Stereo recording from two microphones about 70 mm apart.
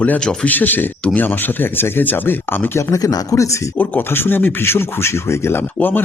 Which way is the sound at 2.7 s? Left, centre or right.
Left.